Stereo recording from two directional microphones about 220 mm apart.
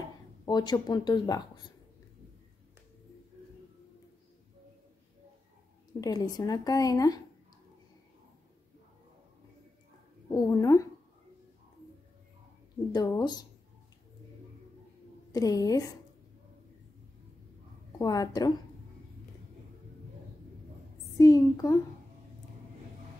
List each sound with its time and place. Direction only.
0.5 s speech: 20° left (ahead or behind)
5.9 s a woman's voice: 15° left (ahead or behind)
10.3 s a woman's voice: 15° left (ahead or behind)
12.9 s a woman's voice: 15° left (ahead or behind)
15.3 s a woman's voice: 15° left (ahead or behind)
17.9 s a woman's voice: 15° left (ahead or behind)
21.2 s a woman's voice: 15° left (ahead or behind)